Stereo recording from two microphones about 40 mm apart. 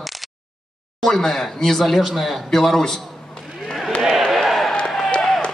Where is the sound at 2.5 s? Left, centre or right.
Centre.